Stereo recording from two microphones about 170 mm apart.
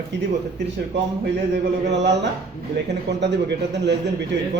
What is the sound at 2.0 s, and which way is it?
A man's voice, 90° right.